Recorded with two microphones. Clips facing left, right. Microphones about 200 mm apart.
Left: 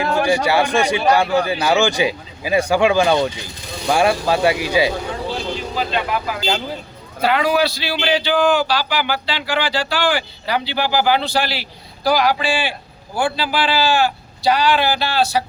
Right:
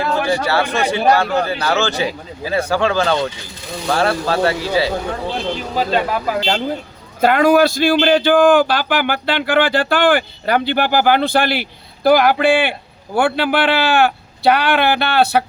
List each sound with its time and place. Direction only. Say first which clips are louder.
0.0 s speech: left 1 dB; 15° left (ahead or behind)
5.3 s a man's voice: right 2 dB; 45° right (ahead or behind); by 15.4 s 60° right (ahead or behind)